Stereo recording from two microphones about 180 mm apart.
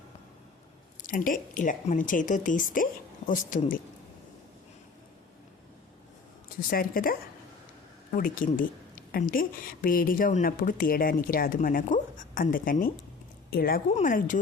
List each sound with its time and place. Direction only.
1.0 s a woman's voice: 50° left (ahead or behind)
6.6 s a woman's voice: 55° left (ahead or behind)